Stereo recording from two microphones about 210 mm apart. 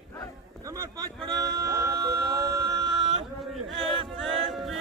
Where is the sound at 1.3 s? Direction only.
15° right (ahead or behind).